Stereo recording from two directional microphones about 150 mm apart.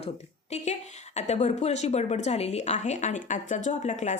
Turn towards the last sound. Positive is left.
turn(degrees=50)  # may be behind; listen again after turning